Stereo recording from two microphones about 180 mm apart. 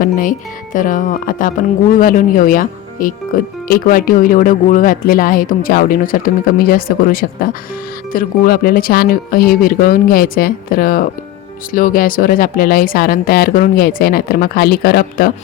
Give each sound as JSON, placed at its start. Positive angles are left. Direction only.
{"t": 0.0, "sound": "speech", "side_deg": 50}